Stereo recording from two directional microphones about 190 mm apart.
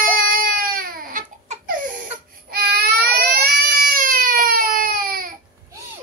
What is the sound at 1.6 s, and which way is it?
Laughter, 45° right (ahead or behind).